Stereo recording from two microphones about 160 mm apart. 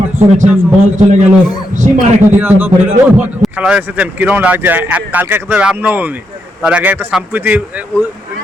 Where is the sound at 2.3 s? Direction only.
10° right (ahead or behind).